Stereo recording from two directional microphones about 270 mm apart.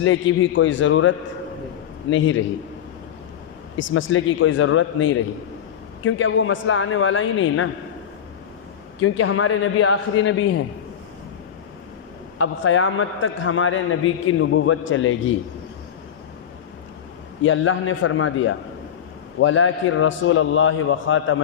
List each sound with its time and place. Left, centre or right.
0.0 s a man's voice: left
3.8 s a man's voice: left
9.0 s a man's voice: left
12.4 s a man's voice: left
17.4 s a man's voice: left